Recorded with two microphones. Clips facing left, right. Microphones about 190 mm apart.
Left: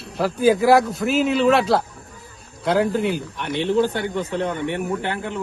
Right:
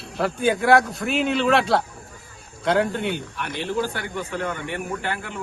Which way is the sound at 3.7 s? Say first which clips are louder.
Left 7 dB; 20° left (ahead or behind).